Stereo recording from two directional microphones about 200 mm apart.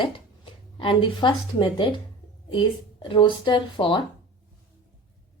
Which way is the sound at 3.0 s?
25° left (ahead or behind).